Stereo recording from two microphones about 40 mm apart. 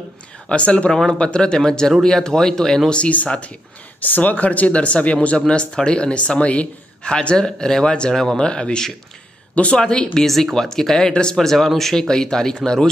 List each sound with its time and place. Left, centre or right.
0.5 s speech: left; by 2.9 s centre
4.0 s speech: left
7.0 s speech: left
10.2 s speech: centre